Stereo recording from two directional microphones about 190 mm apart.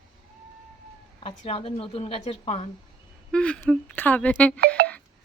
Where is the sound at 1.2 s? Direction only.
30° left (ahead or behind).